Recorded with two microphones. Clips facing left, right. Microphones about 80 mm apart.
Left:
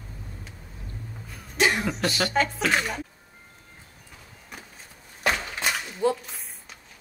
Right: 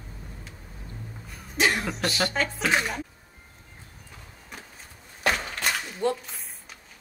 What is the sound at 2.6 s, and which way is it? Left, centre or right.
Speech, centre.